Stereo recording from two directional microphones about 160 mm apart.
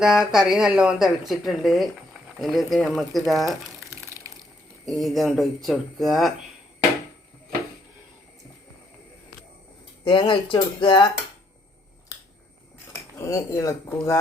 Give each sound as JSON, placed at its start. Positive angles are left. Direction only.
{"t": 0.0, "sound": "speech", "side_deg": -5}
{"t": 3.8, "sound": "a sound", "side_deg": -15}
{"t": 4.9, "sound": "speech", "side_deg": 0}
{"t": 10.0, "sound": "speech", "side_deg": 30}
{"t": 12.1, "sound": "finger snapping", "side_deg": 20}
{"t": 13.1, "sound": "speech", "side_deg": 20}